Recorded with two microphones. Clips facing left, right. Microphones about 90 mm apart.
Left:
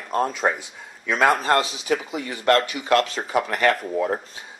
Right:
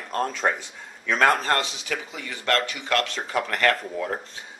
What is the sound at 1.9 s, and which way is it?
Speech, 30° left (ahead or behind).